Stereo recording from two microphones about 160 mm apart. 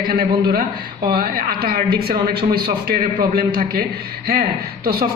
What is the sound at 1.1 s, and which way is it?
A woman's voice, 65° right (ahead or behind).